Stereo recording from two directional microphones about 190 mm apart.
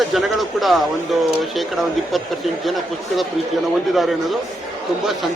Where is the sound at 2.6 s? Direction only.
Centre (ahead or behind).